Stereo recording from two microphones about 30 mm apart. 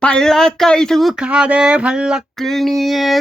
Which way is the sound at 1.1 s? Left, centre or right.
Right.